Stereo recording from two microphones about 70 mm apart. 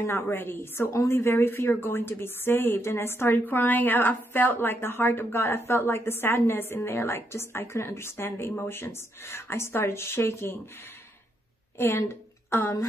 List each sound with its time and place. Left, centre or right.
0.0 s a woman's voice: left
11.8 s a woman's voice: left